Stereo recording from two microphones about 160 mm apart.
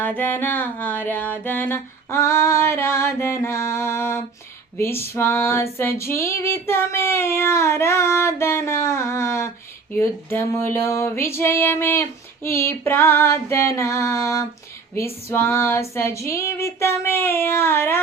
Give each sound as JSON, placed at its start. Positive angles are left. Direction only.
{"t": 0.0, "sound": "female singing", "side_deg": 10}